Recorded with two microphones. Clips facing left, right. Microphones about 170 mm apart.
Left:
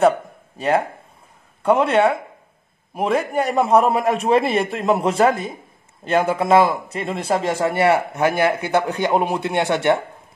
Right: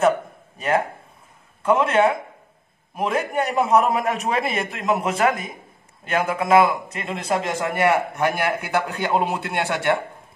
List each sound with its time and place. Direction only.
0.6 s a man's voice: 30° left (ahead or behind)